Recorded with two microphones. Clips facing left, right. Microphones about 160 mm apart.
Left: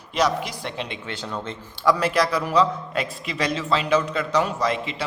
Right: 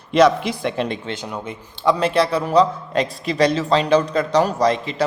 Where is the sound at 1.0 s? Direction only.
20° right (ahead or behind).